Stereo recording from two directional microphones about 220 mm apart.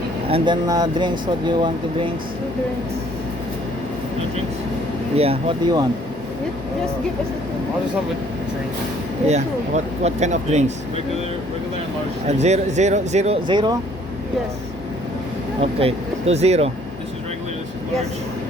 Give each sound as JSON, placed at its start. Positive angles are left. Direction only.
{"t": 0.3, "sound": "speech", "side_deg": -25}
{"t": 5.1, "sound": "speech", "side_deg": -25}
{"t": 9.2, "sound": "speech", "side_deg": -30}
{"t": 12.3, "sound": "speech", "side_deg": -30}
{"t": 15.6, "sound": "speech", "side_deg": -25}